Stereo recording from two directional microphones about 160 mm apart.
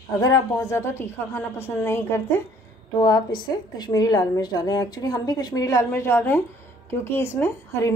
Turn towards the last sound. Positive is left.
turn(degrees=15)  # may be behind; listen again after turning